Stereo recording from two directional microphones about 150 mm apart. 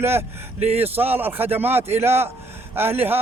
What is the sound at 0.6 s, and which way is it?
Speech, 45° right (ahead or behind).